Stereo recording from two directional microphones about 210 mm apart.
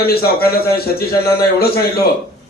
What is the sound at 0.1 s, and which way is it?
A man's voice, 45° left (ahead or behind).